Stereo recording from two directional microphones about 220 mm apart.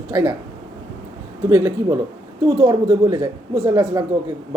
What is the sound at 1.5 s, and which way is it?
Speech, 15° right (ahead or behind).